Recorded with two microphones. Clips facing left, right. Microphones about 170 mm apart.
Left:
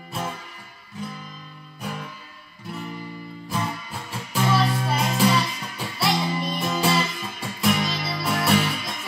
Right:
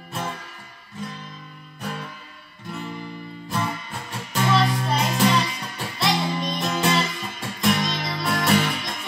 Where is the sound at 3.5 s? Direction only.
5° left (ahead or behind).